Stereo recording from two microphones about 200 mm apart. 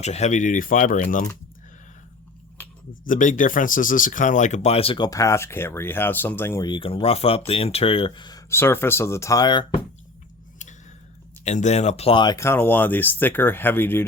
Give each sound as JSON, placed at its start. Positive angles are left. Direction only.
{"t": 0.0, "sound": "speech", "side_deg": 35}
{"t": 3.0, "sound": "speech", "side_deg": 40}
{"t": 11.4, "sound": "speech", "side_deg": 35}